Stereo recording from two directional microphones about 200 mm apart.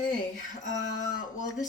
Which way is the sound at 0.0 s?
40° left (ahead or behind).